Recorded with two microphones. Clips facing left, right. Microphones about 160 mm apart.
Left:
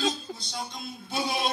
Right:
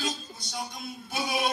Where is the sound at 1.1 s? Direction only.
25° left (ahead or behind).